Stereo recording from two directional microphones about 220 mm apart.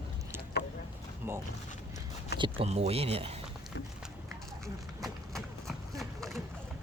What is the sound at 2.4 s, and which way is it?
Speech, 25° right (ahead or behind).